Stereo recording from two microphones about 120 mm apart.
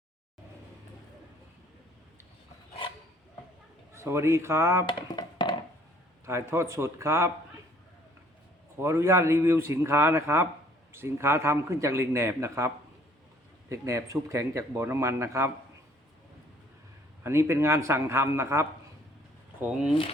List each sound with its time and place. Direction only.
3.9 s a man's voice: 25° right (ahead or behind)
4.9 s a sound: 40° left (ahead or behind)
6.2 s a man's voice: 20° right (ahead or behind)
8.8 s a man's voice: 20° right (ahead or behind)
17.2 s a man's voice: 20° right (ahead or behind)